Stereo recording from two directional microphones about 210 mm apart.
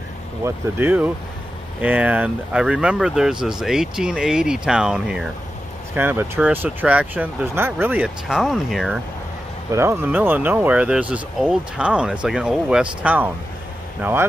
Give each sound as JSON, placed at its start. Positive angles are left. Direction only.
{"t": 0.4, "sound": "speech", "side_deg": -10}
{"t": 9.7, "sound": "speech", "side_deg": -10}